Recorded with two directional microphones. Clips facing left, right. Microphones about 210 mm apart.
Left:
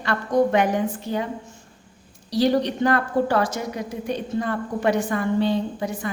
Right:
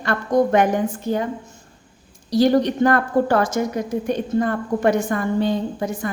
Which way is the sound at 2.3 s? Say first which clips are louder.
Right 4 dB; 50° right (ahead or behind).